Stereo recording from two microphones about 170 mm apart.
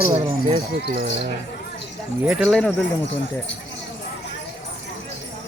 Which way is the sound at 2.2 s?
Centre (ahead or behind).